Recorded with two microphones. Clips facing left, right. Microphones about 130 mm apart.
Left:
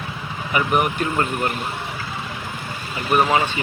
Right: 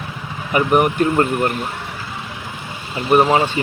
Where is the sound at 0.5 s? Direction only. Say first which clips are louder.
Right 5 dB; 40° right (ahead or behind).